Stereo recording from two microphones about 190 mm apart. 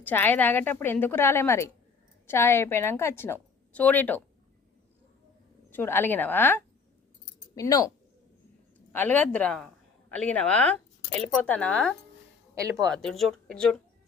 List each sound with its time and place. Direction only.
0.0 s a woman's voice: 10° left (ahead or behind)
5.7 s a woman's voice: 10° left (ahead or behind)